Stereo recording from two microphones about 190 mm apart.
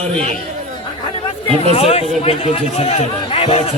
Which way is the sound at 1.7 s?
30° left (ahead or behind).